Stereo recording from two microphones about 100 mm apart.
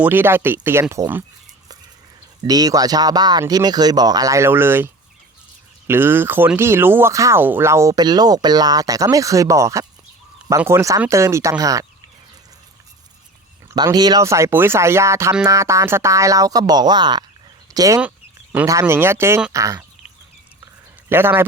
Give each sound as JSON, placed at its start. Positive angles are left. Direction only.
{"t": 0.0, "sound": "speech", "side_deg": -20}
{"t": 2.4, "sound": "speech", "side_deg": -40}
{"t": 5.9, "sound": "speech", "side_deg": -20}
{"t": 7.9, "sound": "speech", "side_deg": -40}
{"t": 13.9, "sound": "speech", "side_deg": -40}
{"t": 17.7, "sound": "speech", "side_deg": -35}
{"t": 21.1, "sound": "speech", "side_deg": -20}